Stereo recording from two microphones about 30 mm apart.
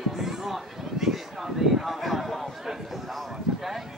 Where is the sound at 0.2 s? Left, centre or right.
Centre.